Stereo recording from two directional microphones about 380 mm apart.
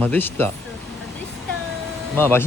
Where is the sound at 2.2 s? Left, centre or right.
Centre.